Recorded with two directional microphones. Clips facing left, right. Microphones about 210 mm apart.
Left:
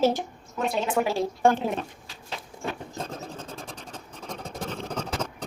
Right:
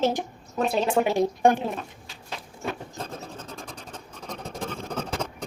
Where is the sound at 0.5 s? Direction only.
30° right (ahead or behind).